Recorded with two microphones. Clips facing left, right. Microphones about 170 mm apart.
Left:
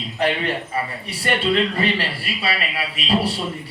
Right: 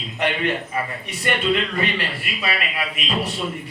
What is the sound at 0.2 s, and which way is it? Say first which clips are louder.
A man's voice: left 1 dB; 35° left (ahead or behind).